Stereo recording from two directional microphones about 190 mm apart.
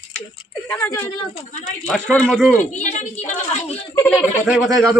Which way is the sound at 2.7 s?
40° left (ahead or behind).